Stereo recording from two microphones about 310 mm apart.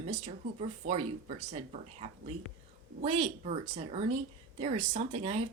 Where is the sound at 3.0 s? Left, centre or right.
Centre.